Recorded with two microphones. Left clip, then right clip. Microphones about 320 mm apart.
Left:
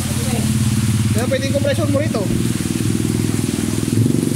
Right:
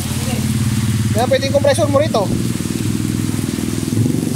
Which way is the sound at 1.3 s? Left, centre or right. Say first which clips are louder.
Right 6 dB; centre.